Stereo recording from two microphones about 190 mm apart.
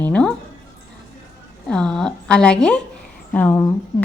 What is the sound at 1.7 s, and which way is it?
A woman's voice, 5° left (ahead or behind).